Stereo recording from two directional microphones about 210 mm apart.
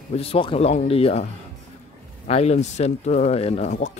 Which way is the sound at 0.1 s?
25° left (ahead or behind).